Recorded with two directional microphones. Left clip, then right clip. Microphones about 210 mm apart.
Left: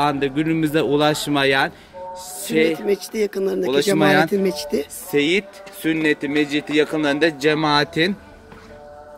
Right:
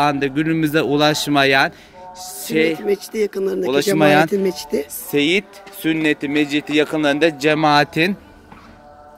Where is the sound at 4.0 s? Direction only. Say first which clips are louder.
Right 4 dB; 35° right (ahead or behind).